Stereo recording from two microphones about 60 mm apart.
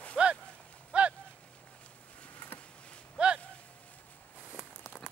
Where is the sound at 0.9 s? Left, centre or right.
Right.